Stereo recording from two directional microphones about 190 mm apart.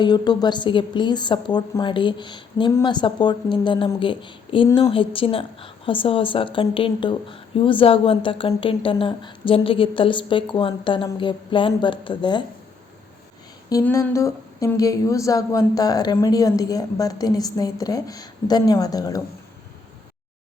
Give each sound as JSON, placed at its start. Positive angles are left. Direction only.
{"t": 0.0, "sound": "a woman's voice", "side_deg": 20}
{"t": 13.7, "sound": "a woman's voice", "side_deg": 15}